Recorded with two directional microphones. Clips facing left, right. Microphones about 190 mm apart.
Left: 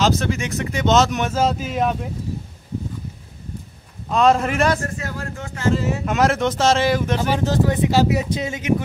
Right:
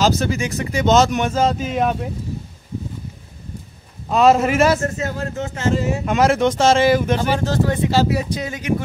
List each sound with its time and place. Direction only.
0.0 s speech: centre (ahead or behind)
4.1 s speech: 5° right (ahead or behind)
4.8 s speech: 25° right (ahead or behind)
6.0 s speech: centre (ahead or behind)
7.4 s speech: 15° left (ahead or behind)